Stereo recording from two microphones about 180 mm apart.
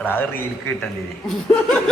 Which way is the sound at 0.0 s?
10° left (ahead or behind).